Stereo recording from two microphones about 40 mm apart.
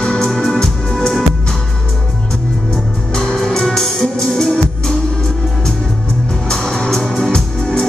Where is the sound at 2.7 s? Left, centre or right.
Centre.